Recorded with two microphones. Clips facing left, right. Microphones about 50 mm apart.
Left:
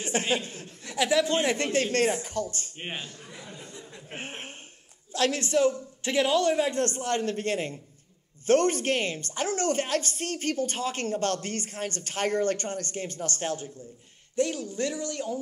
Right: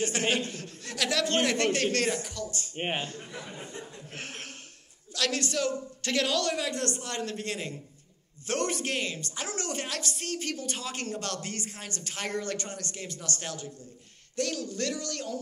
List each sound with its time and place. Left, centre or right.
0.2 s a man's voice: right
0.5 s a man's voice: left
2.7 s a man's voice: right
3.3 s speech: right
4.1 s a man's voice: left
14.3 s a man's voice: left